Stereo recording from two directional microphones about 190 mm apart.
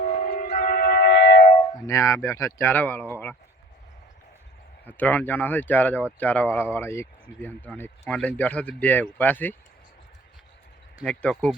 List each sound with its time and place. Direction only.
0.0 s music: 40° left (ahead or behind); by 1.5 s 60° left (ahead or behind)
1.7 s speech: 15° left (ahead or behind)
4.9 s speech: 10° left (ahead or behind)
11.0 s speech: 5° left (ahead or behind)